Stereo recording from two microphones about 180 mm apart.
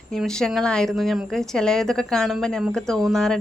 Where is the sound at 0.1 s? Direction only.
5° left (ahead or behind).